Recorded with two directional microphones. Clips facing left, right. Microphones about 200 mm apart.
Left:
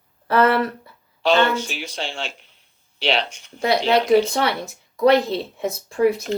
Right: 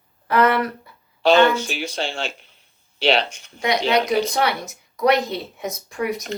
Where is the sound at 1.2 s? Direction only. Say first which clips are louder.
Right 3 dB; 45° right (ahead or behind).